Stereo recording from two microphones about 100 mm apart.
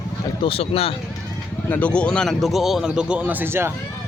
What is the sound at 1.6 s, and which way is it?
A man's voice, 15° left (ahead or behind).